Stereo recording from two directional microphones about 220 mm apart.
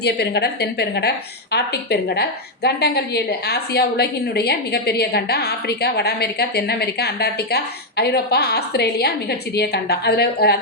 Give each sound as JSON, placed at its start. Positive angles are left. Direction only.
{"t": 0.0, "sound": "a woman's voice", "side_deg": 50}